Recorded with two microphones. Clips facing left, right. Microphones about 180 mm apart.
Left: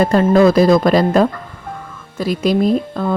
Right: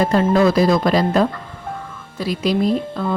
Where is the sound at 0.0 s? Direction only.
50° left (ahead or behind).